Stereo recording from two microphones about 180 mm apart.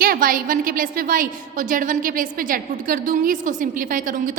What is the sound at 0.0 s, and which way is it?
A woman's voice, 55° right (ahead or behind).